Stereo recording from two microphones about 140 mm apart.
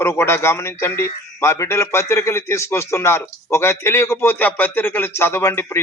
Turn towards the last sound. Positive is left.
turn(degrees=20)  # may be behind; listen again after turning